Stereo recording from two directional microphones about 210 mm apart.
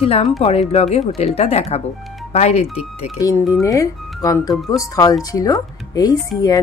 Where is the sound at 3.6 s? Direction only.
15° left (ahead or behind).